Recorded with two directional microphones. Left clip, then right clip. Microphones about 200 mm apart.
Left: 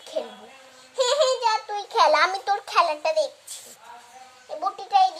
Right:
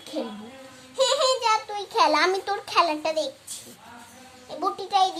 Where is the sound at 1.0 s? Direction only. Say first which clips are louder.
Left 1 dB; 30° left (ahead or behind).